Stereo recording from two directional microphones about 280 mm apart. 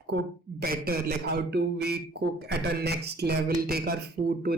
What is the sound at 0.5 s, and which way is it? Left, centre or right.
A man's voice, right.